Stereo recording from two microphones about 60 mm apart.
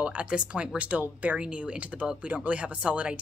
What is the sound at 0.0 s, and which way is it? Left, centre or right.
Speech, centre.